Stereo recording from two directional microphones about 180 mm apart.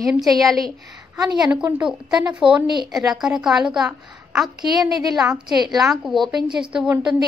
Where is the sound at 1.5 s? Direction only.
5° right (ahead or behind).